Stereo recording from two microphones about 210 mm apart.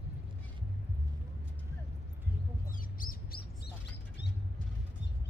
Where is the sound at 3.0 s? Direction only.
45° left (ahead or behind).